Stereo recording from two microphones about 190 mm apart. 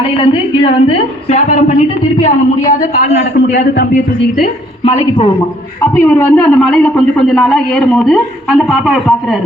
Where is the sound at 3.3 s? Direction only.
60° left (ahead or behind).